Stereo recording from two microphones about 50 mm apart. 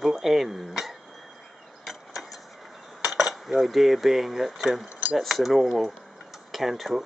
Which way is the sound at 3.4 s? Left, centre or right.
Centre.